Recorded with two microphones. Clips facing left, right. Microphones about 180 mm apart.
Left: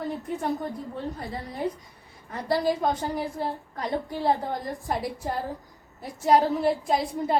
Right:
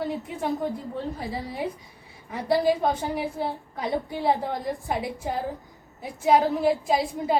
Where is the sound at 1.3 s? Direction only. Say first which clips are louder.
Even; 10° right (ahead or behind).